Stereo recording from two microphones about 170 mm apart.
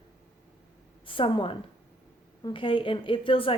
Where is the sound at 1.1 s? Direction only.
30° left (ahead or behind).